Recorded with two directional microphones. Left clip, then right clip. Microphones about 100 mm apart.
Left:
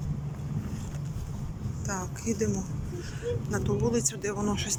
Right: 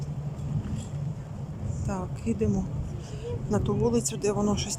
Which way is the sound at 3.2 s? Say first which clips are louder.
Right 1 dB; 35° right (ahead or behind).